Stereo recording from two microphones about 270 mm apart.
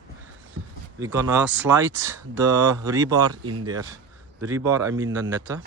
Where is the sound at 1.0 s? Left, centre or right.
Centre.